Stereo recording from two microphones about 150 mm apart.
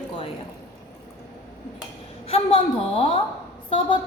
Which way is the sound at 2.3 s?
40° left (ahead or behind).